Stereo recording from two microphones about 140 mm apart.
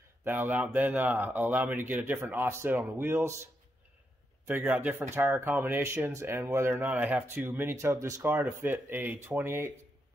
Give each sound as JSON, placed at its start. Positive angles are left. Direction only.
{"t": 0.2, "sound": "speech", "side_deg": -15}
{"t": 4.5, "sound": "speech", "side_deg": -15}